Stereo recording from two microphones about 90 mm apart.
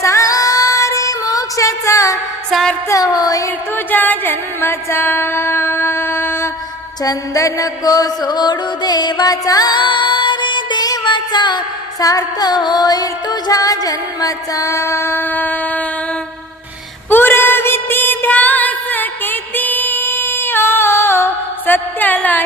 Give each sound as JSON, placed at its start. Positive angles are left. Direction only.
{"t": 0.0, "sound": "female singing", "side_deg": 35}
{"t": 2.5, "sound": "a woman's voice", "side_deg": 0}
{"t": 2.9, "sound": "a sound", "side_deg": 45}
{"t": 3.8, "sound": "music", "side_deg": 20}
{"t": 7.0, "sound": "music", "side_deg": 40}
{"t": 17.1, "sound": "a sound", "side_deg": 20}
{"t": 21.7, "sound": "music", "side_deg": 20}